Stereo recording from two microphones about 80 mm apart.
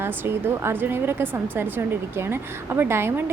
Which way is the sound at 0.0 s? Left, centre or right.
Right.